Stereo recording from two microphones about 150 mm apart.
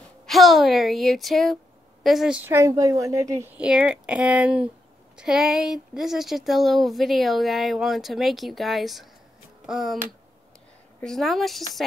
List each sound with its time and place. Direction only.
0.3 s a woman's voice: centre (ahead or behind); by 3.4 s 20° right (ahead or behind)
3.5 s speech: 5° right (ahead or behind)
11.0 s speech: 5° left (ahead or behind)